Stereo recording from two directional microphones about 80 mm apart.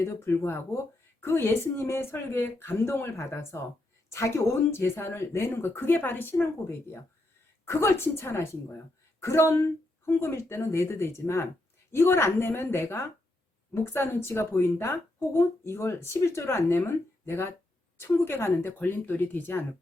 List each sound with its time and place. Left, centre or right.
0.0 s speech: left
4.7 s a woman's voice: left